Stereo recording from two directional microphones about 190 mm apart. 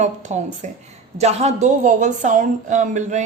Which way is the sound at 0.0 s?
40° right (ahead or behind).